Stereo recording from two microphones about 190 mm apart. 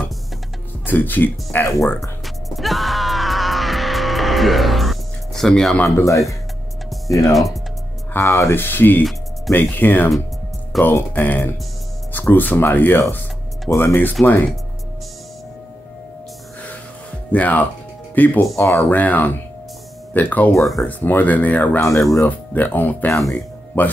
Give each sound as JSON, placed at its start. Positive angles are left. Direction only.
{"t": 0.8, "sound": "speech", "side_deg": 10}
{"t": 2.2, "sound": "music", "side_deg": 0}
{"t": 5.9, "sound": "speech", "side_deg": 15}
{"t": 7.3, "sound": "speech", "side_deg": 0}
{"t": 8.1, "sound": "speech", "side_deg": 10}
{"t": 17.3, "sound": "speech", "side_deg": 10}